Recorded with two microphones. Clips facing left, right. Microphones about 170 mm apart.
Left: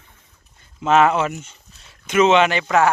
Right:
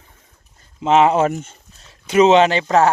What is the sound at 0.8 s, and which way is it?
Speech, 25° right (ahead or behind).